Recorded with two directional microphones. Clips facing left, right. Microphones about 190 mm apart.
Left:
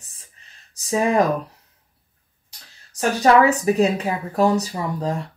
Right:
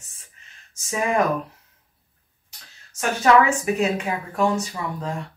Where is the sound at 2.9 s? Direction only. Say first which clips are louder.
Left 2 dB; 35° left (ahead or behind).